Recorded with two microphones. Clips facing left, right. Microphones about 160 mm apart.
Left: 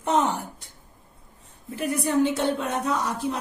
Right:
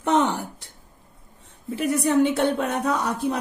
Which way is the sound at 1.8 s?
70° right (ahead or behind).